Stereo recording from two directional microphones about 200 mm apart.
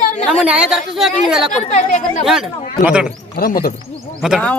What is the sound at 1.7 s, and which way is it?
Speech, 35° left (ahead or behind).